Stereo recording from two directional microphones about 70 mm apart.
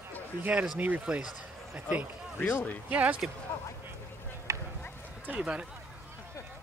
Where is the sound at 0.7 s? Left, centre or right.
Right.